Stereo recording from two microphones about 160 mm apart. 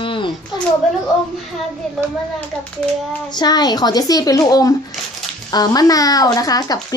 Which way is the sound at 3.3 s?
25° left (ahead or behind).